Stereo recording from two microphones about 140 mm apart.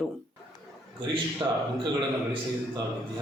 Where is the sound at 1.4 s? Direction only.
30° right (ahead or behind).